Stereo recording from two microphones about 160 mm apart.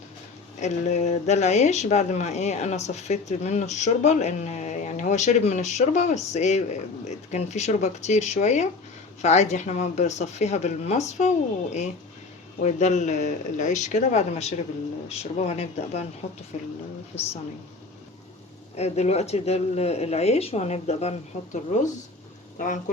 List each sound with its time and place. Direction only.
0.6 s speech: 45° left (ahead or behind)
18.8 s speech: 40° left (ahead or behind)